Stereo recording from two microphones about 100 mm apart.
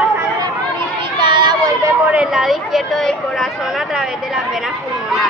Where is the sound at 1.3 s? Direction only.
55° right (ahead or behind).